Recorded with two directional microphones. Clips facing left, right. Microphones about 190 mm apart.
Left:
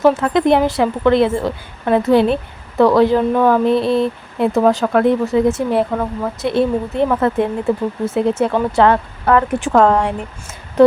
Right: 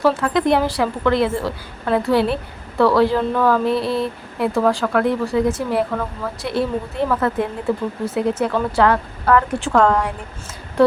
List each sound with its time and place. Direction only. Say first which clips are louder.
0.2 s a woman's voice: left 4 dB; 20° left (ahead or behind)